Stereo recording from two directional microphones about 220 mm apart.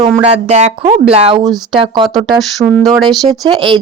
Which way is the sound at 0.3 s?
30° right (ahead or behind).